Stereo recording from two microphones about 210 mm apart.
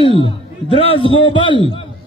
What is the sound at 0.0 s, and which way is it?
A man's voice, 25° left (ahead or behind).